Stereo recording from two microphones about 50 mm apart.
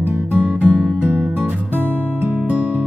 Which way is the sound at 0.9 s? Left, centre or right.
Right.